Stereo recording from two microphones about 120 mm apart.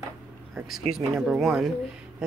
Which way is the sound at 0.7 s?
5° right (ahead or behind).